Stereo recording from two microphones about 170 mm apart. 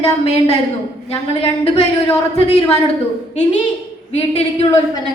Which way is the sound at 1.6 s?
35° left (ahead or behind).